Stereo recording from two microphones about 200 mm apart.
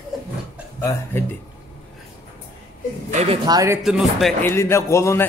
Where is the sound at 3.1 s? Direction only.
30° right (ahead or behind).